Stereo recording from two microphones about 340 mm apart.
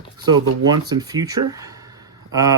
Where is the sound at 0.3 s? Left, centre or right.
Centre.